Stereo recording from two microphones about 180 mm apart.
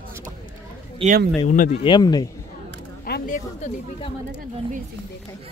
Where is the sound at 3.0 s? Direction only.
55° left (ahead or behind).